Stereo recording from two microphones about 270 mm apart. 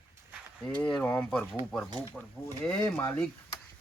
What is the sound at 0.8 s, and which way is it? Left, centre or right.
Speech, centre.